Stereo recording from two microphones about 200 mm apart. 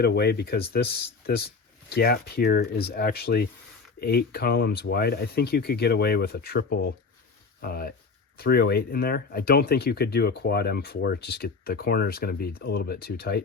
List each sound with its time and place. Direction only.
0.0 s speech: 55° left (ahead or behind)